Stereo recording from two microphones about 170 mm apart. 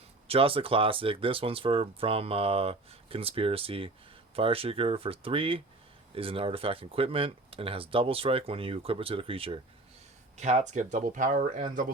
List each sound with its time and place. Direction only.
0.3 s speech: 35° right (ahead or behind)
10.3 s speech: 45° right (ahead or behind)